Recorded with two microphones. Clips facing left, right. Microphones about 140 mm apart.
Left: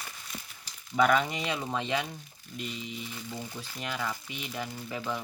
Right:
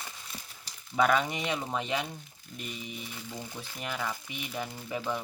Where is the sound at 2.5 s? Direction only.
5° right (ahead or behind).